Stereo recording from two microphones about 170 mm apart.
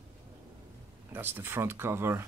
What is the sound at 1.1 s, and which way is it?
Speech, 15° right (ahead or behind).